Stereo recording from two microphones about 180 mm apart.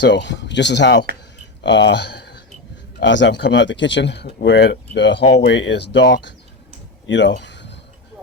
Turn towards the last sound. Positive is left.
turn(degrees=75)  # may be behind; listen again after turning